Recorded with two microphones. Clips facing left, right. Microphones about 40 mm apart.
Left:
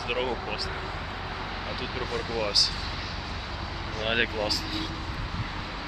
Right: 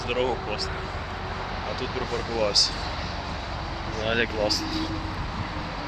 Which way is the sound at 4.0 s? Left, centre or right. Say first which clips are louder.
Right 2 dB; centre.